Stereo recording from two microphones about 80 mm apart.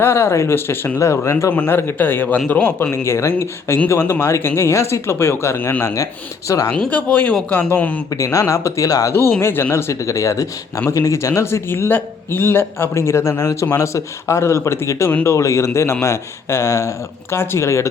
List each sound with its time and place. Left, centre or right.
0.0 s a man's voice: left
2.9 s speech: left
5.8 s speech: left
6.7 s a man's voice: centre
8.2 s speech: left
9.4 s speech: left